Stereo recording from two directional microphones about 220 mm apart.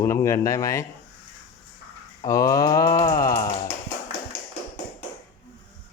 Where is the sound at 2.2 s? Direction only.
15° left (ahead or behind).